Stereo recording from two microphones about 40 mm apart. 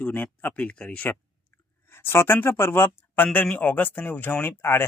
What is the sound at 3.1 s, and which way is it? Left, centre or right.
Speech, left.